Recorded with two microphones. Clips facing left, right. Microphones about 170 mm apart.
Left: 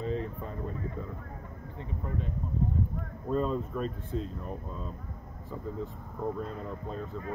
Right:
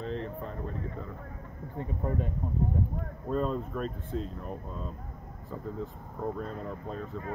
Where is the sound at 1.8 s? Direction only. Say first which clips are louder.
Right 5 dB; 45° right (ahead or behind).